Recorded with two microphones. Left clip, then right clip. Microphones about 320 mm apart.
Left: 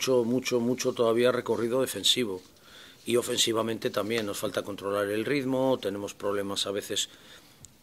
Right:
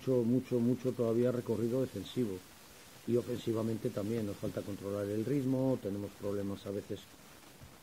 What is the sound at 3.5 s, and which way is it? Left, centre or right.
Speech, centre.